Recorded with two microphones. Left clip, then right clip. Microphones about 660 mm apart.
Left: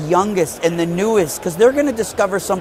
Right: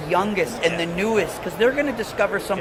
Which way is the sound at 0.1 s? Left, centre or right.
Left.